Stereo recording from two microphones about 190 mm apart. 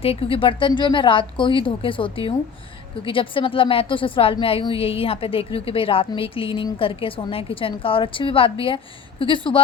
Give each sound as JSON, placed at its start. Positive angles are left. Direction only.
{"t": 0.0, "sound": "a woman's voice", "side_deg": 30}